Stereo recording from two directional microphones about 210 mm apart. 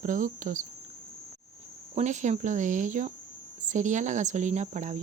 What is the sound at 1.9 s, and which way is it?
Speech, 35° right (ahead or behind).